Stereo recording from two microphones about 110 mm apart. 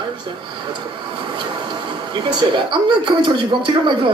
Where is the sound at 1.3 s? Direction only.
45° right (ahead or behind).